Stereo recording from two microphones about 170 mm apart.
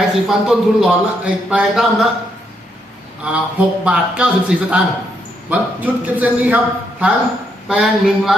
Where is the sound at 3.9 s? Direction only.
5° right (ahead or behind).